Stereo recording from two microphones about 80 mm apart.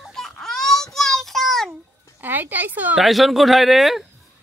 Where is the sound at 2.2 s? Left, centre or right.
Right.